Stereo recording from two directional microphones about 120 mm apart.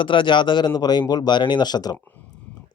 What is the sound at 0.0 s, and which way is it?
Speech, 45° left (ahead or behind).